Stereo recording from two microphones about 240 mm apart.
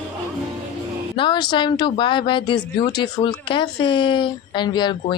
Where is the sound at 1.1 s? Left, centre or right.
Centre.